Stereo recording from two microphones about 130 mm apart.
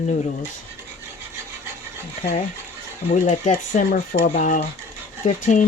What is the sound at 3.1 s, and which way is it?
Speech, 70° left (ahead or behind).